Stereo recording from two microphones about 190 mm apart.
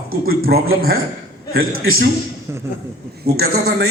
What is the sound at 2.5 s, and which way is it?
Speech, 15° right (ahead or behind).